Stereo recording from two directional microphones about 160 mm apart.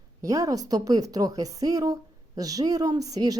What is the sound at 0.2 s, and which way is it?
A woman's voice, 20° right (ahead or behind).